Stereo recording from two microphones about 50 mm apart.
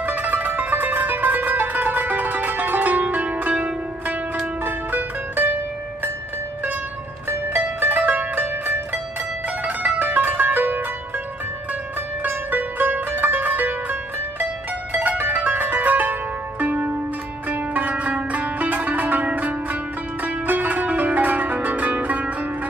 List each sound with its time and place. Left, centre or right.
0.0 s music: right
4.6 s zither: right
7.2 s music: right
12.2 s zither: right
20.2 s music: right